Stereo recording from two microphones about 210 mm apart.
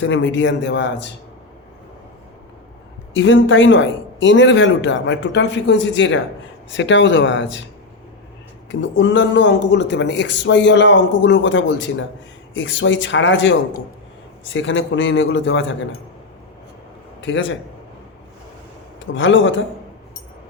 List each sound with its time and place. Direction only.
0.0 s speech: 65° left (ahead or behind)
3.2 s speech: 65° left (ahead or behind)
8.7 s speech: 60° left (ahead or behind)
17.2 s a man's voice: 60° left (ahead or behind)
19.1 s speech: 65° left (ahead or behind)